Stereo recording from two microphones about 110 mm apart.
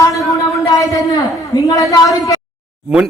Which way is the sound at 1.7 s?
30° left (ahead or behind).